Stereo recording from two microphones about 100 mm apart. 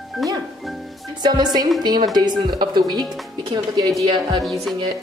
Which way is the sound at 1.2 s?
45° right (ahead or behind).